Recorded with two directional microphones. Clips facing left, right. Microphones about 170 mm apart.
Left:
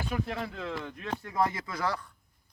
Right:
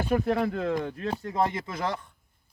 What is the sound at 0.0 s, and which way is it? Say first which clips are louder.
Speech: right 9 dB; 50° right (ahead or behind).